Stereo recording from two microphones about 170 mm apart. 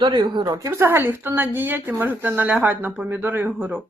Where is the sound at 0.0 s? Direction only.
25° right (ahead or behind); by 3.8 s 10° right (ahead or behind).